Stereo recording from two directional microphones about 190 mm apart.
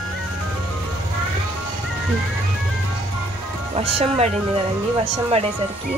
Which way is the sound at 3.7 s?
30° right (ahead or behind).